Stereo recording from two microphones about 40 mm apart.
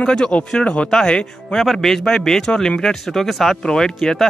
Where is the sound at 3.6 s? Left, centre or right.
Centre.